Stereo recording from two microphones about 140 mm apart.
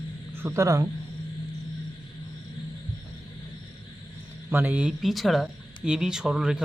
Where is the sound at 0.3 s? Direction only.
20° right (ahead or behind).